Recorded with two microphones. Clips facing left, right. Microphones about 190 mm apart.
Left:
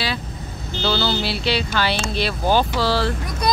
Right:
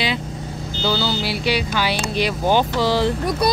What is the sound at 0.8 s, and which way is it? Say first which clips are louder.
Speech: even; 10° right (ahead or behind).